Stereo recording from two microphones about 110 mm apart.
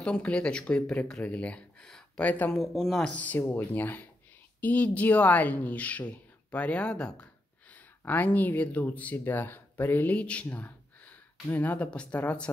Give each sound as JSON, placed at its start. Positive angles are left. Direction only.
{"t": 0.0, "sound": "speech", "side_deg": 10}
{"t": 2.5, "sound": "speech", "side_deg": 0}
{"t": 3.1, "sound": "a woman's voice", "side_deg": 15}